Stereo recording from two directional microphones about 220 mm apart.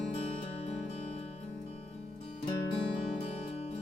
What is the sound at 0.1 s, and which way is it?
Music, 30° left (ahead or behind).